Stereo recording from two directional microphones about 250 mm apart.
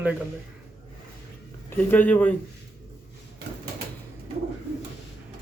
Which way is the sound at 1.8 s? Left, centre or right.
Centre.